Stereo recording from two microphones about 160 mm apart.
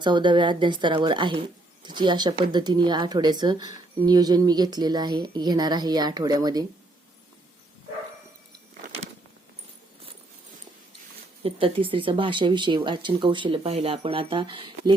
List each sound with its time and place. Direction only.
0.0 s a woman's voice: 30° right (ahead or behind)
11.4 s speech: 35° right (ahead or behind)